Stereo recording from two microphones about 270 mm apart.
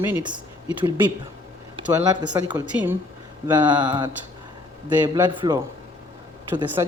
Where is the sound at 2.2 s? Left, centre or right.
Centre.